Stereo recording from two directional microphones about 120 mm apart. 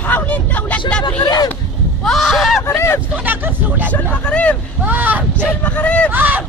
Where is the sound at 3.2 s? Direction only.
15° right (ahead or behind).